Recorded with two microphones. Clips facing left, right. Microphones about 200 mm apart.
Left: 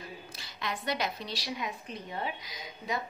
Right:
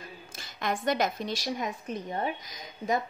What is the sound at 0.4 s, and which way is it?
A woman's voice, 50° right (ahead or behind).